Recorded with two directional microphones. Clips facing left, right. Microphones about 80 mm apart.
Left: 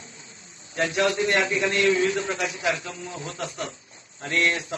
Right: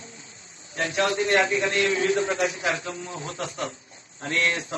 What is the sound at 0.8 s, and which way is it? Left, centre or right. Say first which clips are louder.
A man's voice: left 1 dB; right.